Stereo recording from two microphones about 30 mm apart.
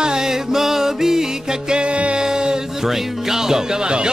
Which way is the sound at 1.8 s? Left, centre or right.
Right.